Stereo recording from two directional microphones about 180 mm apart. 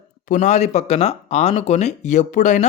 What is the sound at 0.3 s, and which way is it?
Speech, 40° left (ahead or behind).